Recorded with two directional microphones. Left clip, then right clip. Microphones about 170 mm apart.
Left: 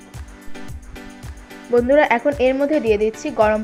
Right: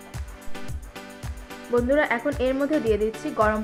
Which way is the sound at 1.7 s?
20° left (ahead or behind).